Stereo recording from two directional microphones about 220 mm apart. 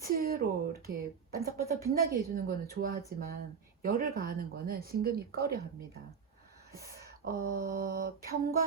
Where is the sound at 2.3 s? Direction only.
40° right (ahead or behind).